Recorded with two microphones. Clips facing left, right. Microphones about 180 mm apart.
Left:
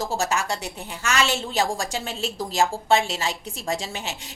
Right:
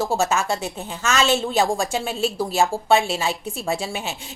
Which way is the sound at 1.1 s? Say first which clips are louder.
Right 4 dB; 20° right (ahead or behind).